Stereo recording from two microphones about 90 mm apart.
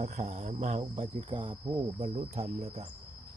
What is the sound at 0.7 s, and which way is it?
Cricket, 90° right.